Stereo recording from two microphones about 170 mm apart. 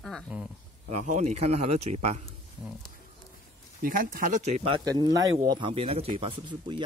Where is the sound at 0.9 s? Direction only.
45° right (ahead or behind).